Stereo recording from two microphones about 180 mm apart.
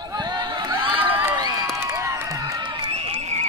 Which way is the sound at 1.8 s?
15° right (ahead or behind).